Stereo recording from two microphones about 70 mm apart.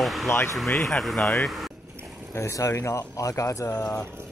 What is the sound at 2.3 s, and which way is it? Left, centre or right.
Speech, left.